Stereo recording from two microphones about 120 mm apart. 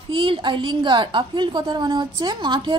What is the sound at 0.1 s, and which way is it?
A woman's voice, 45° right (ahead or behind).